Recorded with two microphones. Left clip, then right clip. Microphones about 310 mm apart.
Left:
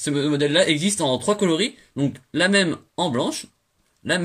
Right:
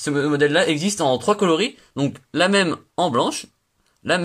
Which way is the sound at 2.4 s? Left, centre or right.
Right.